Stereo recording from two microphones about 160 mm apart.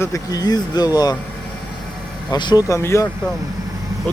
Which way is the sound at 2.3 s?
30° left (ahead or behind).